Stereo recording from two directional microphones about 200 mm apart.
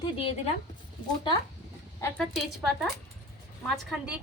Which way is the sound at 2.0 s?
15° left (ahead or behind).